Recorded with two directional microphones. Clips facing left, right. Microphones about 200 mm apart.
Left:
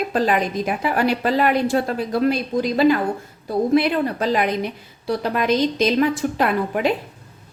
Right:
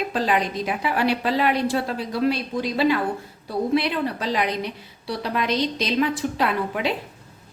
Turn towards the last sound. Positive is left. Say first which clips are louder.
# left 4 dB
turn(degrees=50)  # may be behind; listen again after turning